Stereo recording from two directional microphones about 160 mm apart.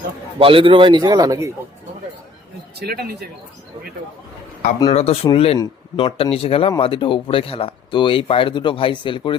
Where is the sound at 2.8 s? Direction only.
90° right.